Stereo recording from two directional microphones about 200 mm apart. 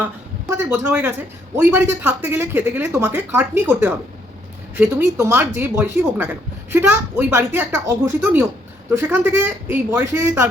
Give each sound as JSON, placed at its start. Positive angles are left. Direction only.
{"t": 0.5, "sound": "speech", "side_deg": -10}